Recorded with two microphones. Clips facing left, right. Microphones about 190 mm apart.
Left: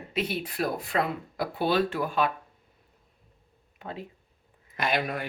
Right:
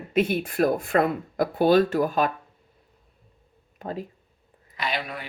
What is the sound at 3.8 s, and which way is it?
Speech, 40° right (ahead or behind).